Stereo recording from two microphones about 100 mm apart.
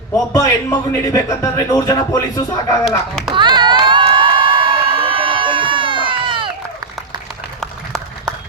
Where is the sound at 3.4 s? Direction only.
50° right (ahead or behind).